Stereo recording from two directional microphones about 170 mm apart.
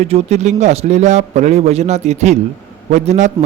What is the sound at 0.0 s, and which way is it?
A man's voice, 40° right (ahead or behind).